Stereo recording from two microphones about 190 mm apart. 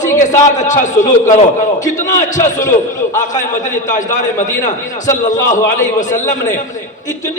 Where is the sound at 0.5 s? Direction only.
40° left (ahead or behind).